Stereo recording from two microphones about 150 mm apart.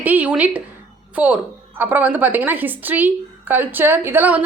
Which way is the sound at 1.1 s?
10° right (ahead or behind).